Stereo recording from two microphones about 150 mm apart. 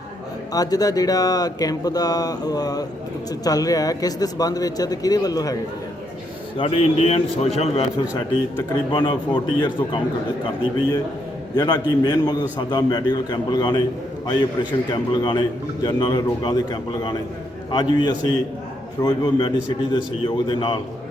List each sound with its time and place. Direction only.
0.5 s a man's voice: 25° left (ahead or behind)
6.6 s a man's voice: 40° left (ahead or behind)
8.9 s a man's voice: 30° left (ahead or behind)
11.5 s a man's voice: 25° left (ahead or behind)
17.7 s a man's voice: 30° left (ahead or behind)